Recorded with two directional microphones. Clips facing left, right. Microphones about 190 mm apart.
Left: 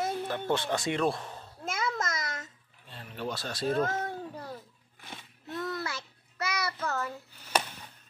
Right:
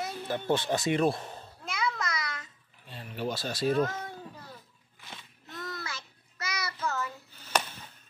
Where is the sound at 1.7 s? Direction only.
45° left (ahead or behind).